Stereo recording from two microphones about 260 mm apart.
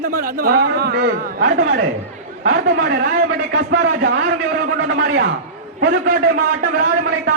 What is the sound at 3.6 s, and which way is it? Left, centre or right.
A man's voice, right.